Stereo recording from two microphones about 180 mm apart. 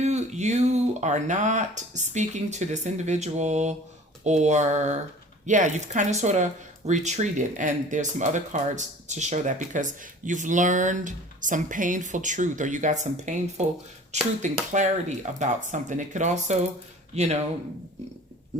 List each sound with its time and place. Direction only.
0.0 s speech: 40° right (ahead or behind)